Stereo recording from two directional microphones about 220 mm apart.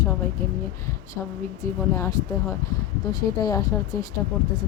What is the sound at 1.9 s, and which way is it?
Speech, 15° left (ahead or behind).